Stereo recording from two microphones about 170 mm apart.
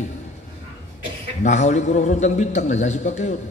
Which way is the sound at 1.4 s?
45° left (ahead or behind).